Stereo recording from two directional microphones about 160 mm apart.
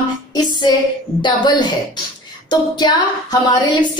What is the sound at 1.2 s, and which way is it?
A woman's voice, 30° left (ahead or behind).